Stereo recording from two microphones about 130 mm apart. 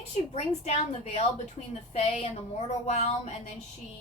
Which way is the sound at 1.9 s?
55° left (ahead or behind).